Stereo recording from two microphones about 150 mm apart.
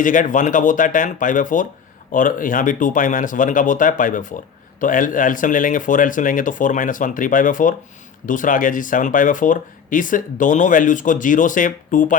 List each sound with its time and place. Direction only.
0.0 s speech: 60° left (ahead or behind)